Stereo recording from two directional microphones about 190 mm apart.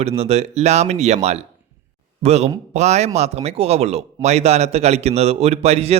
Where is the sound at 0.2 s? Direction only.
35° right (ahead or behind).